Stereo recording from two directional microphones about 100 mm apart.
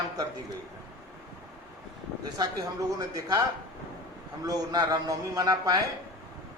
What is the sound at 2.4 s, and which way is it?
Speech, 40° right (ahead or behind).